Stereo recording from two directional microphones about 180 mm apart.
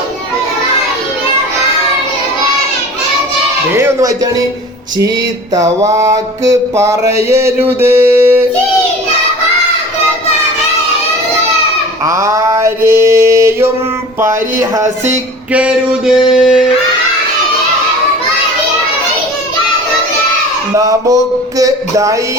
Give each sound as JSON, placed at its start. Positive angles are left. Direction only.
{"t": 3.7, "sound": "mantra", "side_deg": -15}
{"t": 5.8, "sound": "mantra", "side_deg": -15}
{"t": 12.0, "sound": "mantra", "side_deg": -15}
{"t": 15.5, "sound": "a sound", "side_deg": -5}
{"t": 20.7, "sound": "a sound", "side_deg": -20}
{"t": 21.6, "sound": "mantra", "side_deg": -20}